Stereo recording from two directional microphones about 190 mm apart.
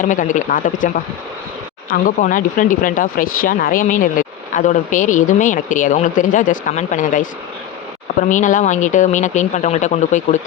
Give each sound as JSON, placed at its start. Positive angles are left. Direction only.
{"t": 0.0, "sound": "speech", "side_deg": 40}
{"t": 1.9, "sound": "speech", "side_deg": 45}
{"t": 8.3, "sound": "speech", "side_deg": 40}